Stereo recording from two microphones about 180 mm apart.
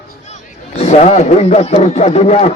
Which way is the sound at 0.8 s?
40° left (ahead or behind).